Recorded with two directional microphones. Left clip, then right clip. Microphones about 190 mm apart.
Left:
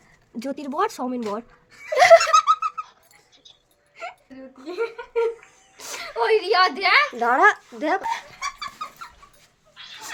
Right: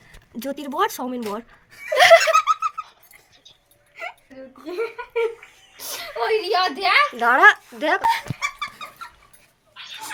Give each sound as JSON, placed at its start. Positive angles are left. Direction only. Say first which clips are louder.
{"t": 0.3, "sound": "speech", "louder": "right 2 dB", "side_deg": 0}
{"t": 2.0, "sound": "laughter", "louder": "even", "side_deg": 10}
{"t": 2.2, "sound": "laughter", "louder": "even", "side_deg": -20}
{"t": 3.9, "sound": "a sound", "louder": "right 2 dB", "side_deg": -25}
{"t": 5.7, "sound": "a woman's voice", "louder": "left 1 dB", "side_deg": 0}
{"t": 8.4, "sound": "chicken", "louder": "right 3 dB", "side_deg": -35}